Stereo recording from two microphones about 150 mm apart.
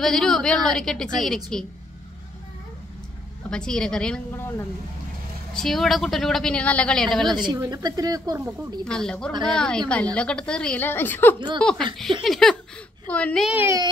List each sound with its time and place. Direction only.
0.0 s a woman's voice: 5° left (ahead or behind)
3.4 s a woman's voice: 5° left (ahead or behind)
5.5 s a woman's voice: centre (ahead or behind)
7.3 s speech: 30° right (ahead or behind)
8.8 s a woman's voice: 5° left (ahead or behind)
11.3 s speech: 30° right (ahead or behind)
12.3 s a woman's voice: centre (ahead or behind)
13.5 s speech: 15° right (ahead or behind)